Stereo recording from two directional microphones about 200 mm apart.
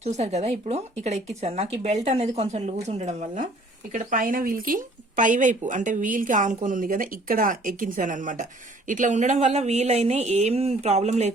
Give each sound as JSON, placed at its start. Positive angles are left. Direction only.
{"t": 0.0, "sound": "speech", "side_deg": -35}